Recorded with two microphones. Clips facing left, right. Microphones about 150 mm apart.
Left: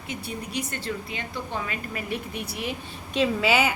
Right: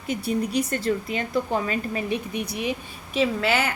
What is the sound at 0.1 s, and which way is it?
A woman's voice, 40° right (ahead or behind).